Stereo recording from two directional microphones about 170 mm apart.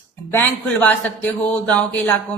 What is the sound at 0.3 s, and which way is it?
Speech, 10° left (ahead or behind).